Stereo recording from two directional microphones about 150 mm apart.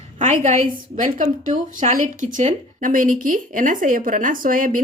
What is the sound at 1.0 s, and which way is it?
Speech, 60° right (ahead or behind).